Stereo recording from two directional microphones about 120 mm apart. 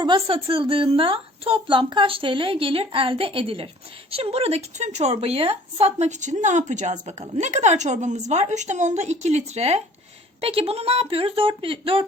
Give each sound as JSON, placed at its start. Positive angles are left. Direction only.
{"t": 0.0, "sound": "a woman's voice", "side_deg": -45}
{"t": 10.4, "sound": "a woman's voice", "side_deg": -55}